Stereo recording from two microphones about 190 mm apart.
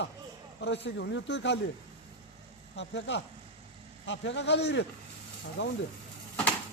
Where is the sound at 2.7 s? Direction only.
70° left (ahead or behind).